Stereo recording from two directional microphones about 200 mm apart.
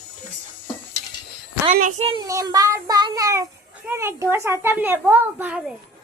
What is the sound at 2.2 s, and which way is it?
A child's voice, 20° right (ahead or behind).